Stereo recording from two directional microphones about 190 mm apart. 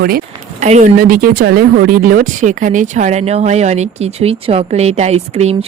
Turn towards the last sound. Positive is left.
turn(degrees=-35)  # may be behind; listen again after turning